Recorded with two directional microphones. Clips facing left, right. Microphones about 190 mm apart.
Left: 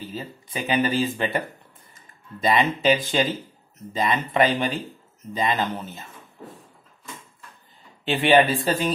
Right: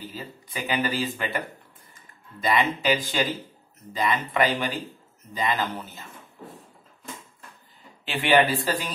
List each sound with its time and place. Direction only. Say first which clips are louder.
0.1 s speech: left 4 dB; 25° left (ahead or behind)
2.4 s speech: left 3 dB; 25° left (ahead or behind)
8.0 s speech: left 3 dB; 25° left (ahead or behind)